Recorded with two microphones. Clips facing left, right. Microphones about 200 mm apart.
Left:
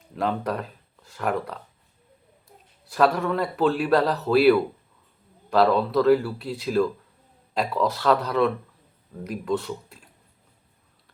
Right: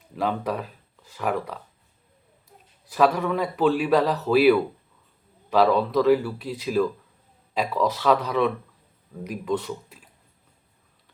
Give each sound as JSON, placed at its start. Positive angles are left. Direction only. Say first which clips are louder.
{"t": 0.1, "sound": "a man's voice", "louder": "even", "side_deg": -5}
{"t": 2.9, "sound": "a man's voice", "louder": "even", "side_deg": -5}
{"t": 7.7, "sound": "speech", "louder": "right 1 dB", "side_deg": 5}
{"t": 8.0, "sound": "a man's voice", "louder": "left 1 dB", "side_deg": -5}